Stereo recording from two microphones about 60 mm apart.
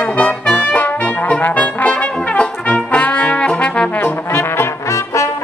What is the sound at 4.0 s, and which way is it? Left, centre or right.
Trombone, left.